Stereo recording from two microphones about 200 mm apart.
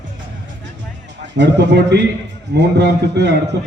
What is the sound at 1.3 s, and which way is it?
A man's voice, 60° right (ahead or behind).